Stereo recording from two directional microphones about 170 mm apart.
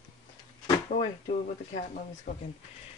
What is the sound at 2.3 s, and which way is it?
Speech, 50° left (ahead or behind).